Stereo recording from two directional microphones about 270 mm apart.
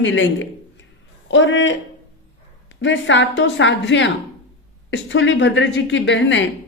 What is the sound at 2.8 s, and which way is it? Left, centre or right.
A woman's voice, left.